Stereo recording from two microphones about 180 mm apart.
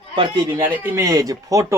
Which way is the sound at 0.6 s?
10° right (ahead or behind).